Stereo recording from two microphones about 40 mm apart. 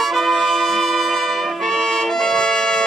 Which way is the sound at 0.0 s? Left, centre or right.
Centre.